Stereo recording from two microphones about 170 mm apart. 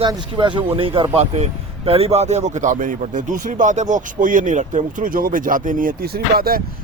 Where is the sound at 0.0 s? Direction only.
25° right (ahead or behind).